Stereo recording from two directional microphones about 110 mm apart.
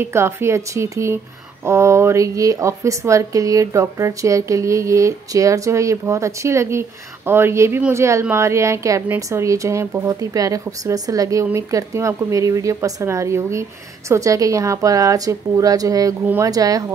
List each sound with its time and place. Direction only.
0.0 s a woman's voice: 25° right (ahead or behind)